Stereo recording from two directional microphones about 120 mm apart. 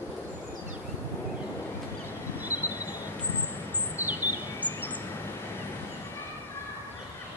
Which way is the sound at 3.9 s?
15° right (ahead or behind).